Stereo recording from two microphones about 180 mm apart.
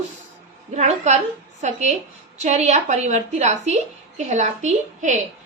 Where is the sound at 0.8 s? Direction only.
40° right (ahead or behind).